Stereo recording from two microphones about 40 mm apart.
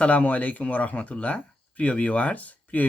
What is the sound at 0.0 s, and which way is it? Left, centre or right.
Speech, left.